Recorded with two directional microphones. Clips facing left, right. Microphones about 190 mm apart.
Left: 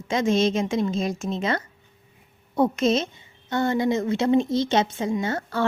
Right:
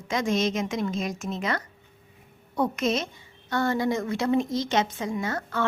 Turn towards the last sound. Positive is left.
turn(degrees=30)  # may be behind; listen again after turning